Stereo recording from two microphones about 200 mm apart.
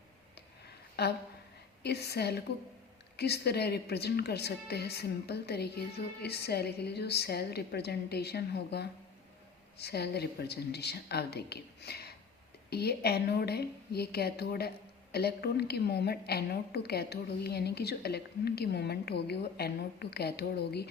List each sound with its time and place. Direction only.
1.0 s a woman's voice: 55° left (ahead or behind)